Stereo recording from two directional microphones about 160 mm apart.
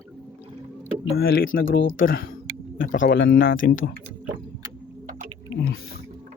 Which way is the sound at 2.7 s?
60° left (ahead or behind).